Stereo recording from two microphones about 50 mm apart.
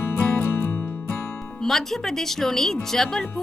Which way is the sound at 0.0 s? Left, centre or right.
Left.